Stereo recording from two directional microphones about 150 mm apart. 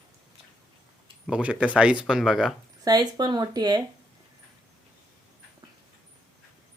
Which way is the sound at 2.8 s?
25° right (ahead or behind).